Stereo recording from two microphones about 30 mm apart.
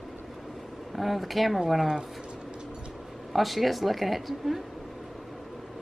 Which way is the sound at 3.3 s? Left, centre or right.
Centre.